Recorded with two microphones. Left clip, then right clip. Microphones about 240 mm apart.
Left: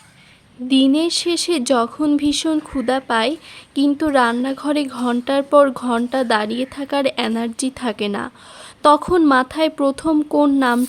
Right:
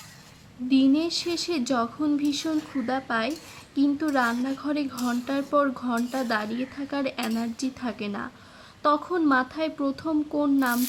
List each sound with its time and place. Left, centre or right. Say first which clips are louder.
0.7 s a woman's voice: left 7 dB; left